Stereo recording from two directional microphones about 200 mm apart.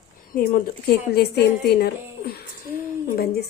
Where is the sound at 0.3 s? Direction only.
45° left (ahead or behind).